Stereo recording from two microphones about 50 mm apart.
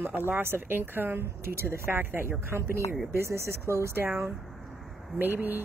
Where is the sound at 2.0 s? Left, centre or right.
Right.